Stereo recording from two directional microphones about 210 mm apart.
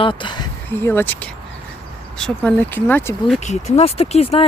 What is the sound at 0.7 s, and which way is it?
Speech, 10° left (ahead or behind).